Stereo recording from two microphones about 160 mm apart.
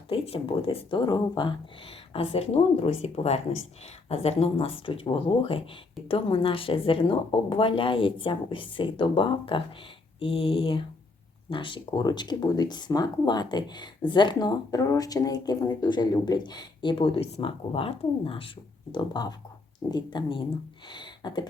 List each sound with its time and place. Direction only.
0.1 s speech: 35° left (ahead or behind)
2.1 s speech: 40° left (ahead or behind)
20.9 s a sound: 30° left (ahead or behind)